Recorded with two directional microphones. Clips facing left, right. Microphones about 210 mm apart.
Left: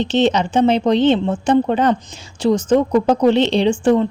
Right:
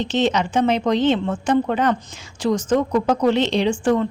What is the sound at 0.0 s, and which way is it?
A woman's voice, 30° left (ahead or behind).